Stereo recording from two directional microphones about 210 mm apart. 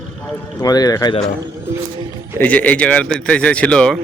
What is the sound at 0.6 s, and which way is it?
Speech, 20° left (ahead or behind).